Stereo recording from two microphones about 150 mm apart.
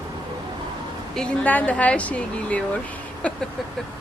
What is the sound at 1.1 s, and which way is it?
Speech, 5° left (ahead or behind).